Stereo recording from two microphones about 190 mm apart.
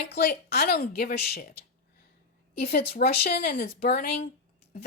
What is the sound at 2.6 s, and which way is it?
A woman's voice, 55° left (ahead or behind).